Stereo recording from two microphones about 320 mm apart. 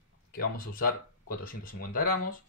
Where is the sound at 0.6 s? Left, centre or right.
Left.